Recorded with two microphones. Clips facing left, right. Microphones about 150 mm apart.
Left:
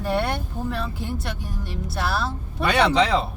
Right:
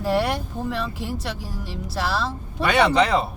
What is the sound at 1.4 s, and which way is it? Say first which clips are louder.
Speech: even; 90° right.